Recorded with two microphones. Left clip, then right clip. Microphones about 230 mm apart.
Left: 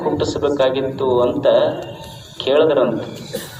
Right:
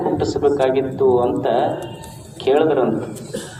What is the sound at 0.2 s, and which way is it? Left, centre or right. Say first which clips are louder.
A man's voice: even; left.